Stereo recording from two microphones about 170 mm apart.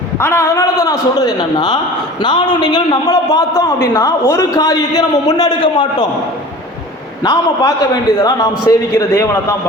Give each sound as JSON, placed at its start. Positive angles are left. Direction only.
{"t": 0.2, "sound": "a man's voice", "side_deg": 15}
{"t": 7.2, "sound": "a man's voice", "side_deg": 20}